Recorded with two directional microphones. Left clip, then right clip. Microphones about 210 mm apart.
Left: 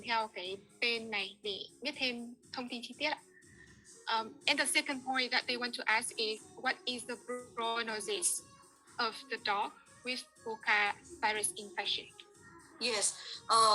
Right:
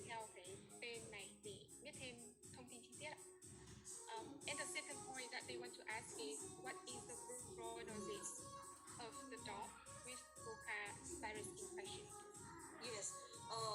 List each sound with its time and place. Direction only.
0.0 s a woman's voice: 45° left (ahead or behind)